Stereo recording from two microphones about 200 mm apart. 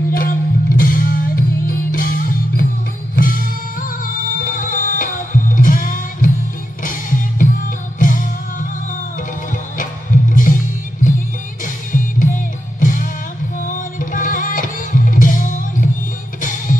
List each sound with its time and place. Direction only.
0.1 s music: 45° left (ahead or behind)
9.8 s music: 40° left (ahead or behind)
11.6 s music: 40° left (ahead or behind)